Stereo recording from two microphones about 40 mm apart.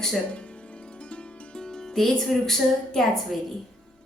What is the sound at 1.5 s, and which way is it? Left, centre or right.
Music, centre.